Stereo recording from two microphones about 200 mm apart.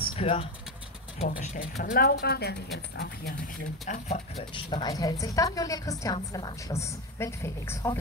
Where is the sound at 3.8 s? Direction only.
35° left (ahead or behind).